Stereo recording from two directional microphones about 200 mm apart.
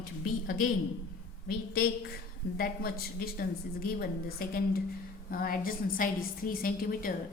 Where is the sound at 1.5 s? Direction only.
50° left (ahead or behind).